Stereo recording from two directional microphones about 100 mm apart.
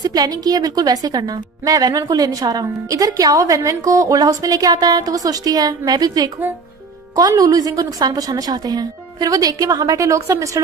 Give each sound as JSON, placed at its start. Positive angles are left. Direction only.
{"t": 0.0, "sound": "a woman's voice", "side_deg": -40}